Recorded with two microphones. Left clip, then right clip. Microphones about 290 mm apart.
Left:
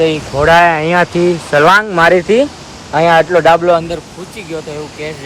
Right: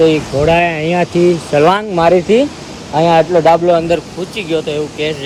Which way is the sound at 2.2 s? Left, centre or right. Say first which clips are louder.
Even; centre.